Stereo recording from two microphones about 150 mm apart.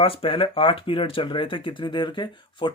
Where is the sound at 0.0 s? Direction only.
35° left (ahead or behind).